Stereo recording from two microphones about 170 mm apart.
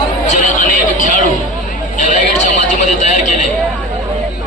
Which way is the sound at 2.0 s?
50° left (ahead or behind).